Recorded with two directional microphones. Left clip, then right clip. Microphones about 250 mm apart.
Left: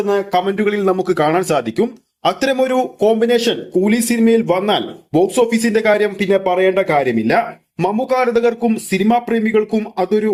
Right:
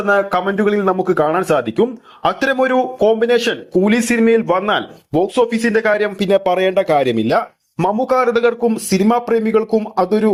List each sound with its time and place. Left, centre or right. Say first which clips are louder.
0.1 s speech: right 3 dB; centre
6.1 s speech: even; right
7.8 s speech: right 1 dB; centre
8.6 s speech: right 1 dB; centre